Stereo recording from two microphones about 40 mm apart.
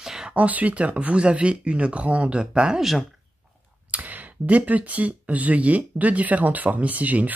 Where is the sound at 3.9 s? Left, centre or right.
Right.